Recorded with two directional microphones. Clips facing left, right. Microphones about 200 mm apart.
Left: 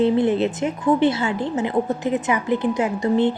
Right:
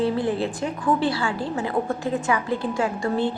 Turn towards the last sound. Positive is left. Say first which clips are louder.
# left 5 dB
turn(degrees=20)  # may be behind; listen again after turning